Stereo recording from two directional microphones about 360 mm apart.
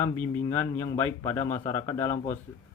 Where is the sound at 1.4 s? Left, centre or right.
Centre.